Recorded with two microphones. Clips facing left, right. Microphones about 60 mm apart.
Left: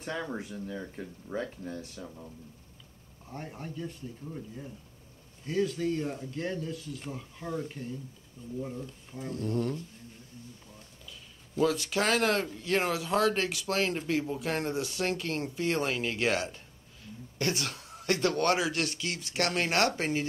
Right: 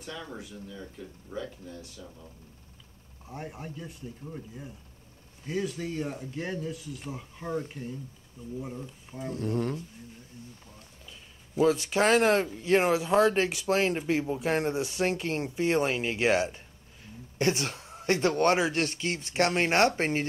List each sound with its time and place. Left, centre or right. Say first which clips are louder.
0.0 s speech: left 5 dB; left
3.3 s speech: right 1 dB; centre
9.3 s speech: right 1 dB; right
11.6 s speech: right 4 dB; right